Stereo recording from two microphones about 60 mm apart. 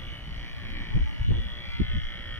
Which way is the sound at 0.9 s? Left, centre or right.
Left.